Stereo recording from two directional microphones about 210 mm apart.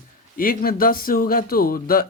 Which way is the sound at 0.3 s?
45° left (ahead or behind).